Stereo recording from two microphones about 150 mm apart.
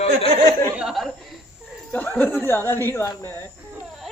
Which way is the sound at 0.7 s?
5° right (ahead or behind).